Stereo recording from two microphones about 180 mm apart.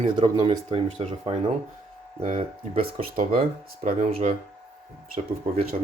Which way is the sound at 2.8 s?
55° right (ahead or behind).